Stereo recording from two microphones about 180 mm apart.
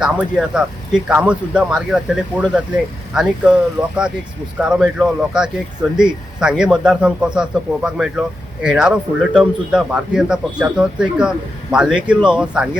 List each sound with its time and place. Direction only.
0.0 s a man's voice: 5° right (ahead or behind)